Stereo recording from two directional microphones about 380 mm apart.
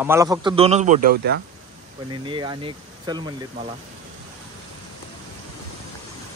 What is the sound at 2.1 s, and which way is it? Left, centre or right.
Speech, centre.